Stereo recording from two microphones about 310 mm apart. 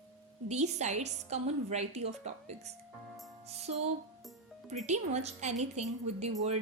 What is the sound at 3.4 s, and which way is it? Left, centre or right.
Music, right.